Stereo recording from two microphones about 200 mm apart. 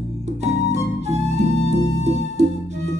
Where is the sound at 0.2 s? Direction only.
35° right (ahead or behind).